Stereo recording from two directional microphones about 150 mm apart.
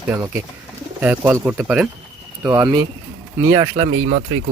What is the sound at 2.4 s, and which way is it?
Speech, 20° right (ahead or behind).